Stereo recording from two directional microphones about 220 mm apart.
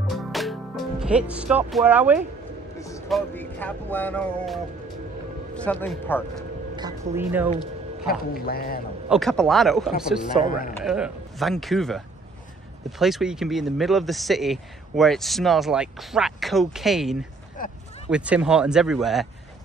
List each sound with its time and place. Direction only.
0.1 s music: centre (ahead or behind)
1.7 s speech: 5° right (ahead or behind)
3.1 s speech: 5° left (ahead or behind)
6.8 s speech: 10° right (ahead or behind)
8.1 s speech: 45° left (ahead or behind)
9.1 s speech: centre (ahead or behind)
13.0 s speech: centre (ahead or behind)
17.6 s a sound: 40° left (ahead or behind)
18.1 s speech: 5° right (ahead or behind)